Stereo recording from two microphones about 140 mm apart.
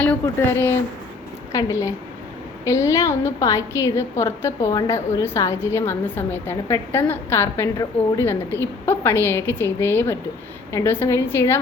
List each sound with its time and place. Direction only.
0.0 s a woman's voice: 15° left (ahead or behind)